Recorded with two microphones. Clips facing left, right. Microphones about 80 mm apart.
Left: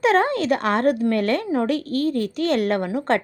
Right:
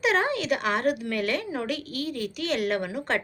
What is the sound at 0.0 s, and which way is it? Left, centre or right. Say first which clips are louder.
A woman's voice: left 6 dB; left.